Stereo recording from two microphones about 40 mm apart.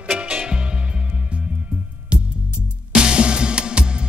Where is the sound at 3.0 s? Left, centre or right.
Right.